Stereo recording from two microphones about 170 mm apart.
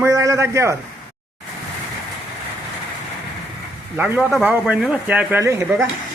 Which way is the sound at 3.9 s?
10° right (ahead or behind).